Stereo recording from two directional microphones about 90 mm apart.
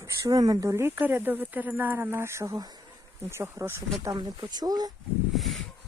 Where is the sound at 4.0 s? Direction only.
45° right (ahead or behind).